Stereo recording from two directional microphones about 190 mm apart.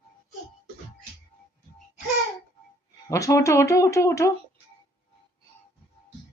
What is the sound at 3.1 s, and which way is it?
Speech, 15° left (ahead or behind).